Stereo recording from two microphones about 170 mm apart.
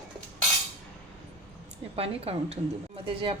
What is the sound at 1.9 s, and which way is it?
A woman's voice, 35° right (ahead or behind).